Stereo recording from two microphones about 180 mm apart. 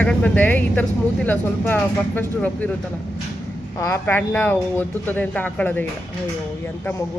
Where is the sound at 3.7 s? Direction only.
15° left (ahead or behind).